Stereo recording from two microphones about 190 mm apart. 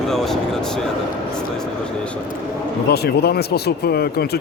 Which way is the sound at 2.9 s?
55° left (ahead or behind).